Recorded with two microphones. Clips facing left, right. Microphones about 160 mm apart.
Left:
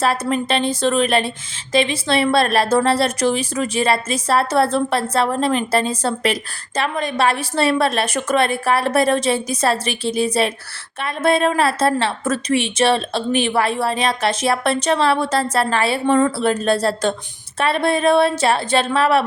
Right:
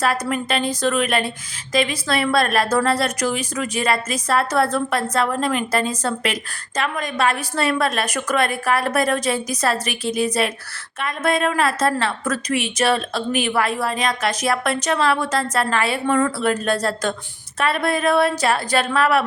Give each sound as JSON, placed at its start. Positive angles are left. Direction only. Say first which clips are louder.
{"t": 0.0, "sound": "a woman's voice", "louder": "left 2 dB", "side_deg": 30}